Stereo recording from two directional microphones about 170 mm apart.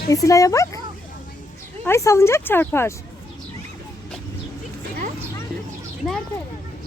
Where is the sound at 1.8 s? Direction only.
15° left (ahead or behind).